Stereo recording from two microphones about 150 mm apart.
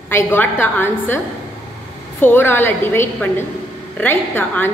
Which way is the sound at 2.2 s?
15° left (ahead or behind).